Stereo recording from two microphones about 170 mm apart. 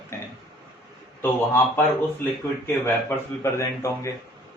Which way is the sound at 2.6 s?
15° left (ahead or behind).